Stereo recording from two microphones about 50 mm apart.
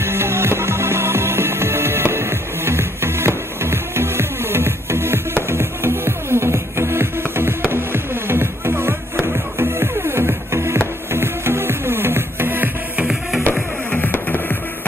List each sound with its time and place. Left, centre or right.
0.0 s music: right
13.9 s music: left